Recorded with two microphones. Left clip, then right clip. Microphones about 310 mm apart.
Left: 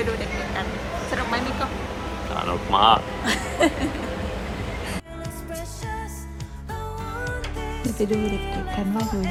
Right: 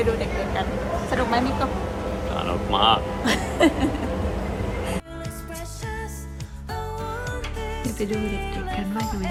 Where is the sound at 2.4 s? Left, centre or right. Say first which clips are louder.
Left 3 dB; centre.